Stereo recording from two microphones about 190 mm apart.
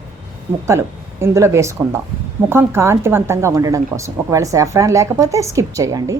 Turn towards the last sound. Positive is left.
turn(degrees=-15)  # may be behind; listen again after turning